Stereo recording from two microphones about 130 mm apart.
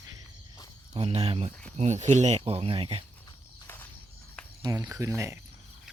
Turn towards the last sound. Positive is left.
turn(degrees=-25)  # may be behind; listen again after turning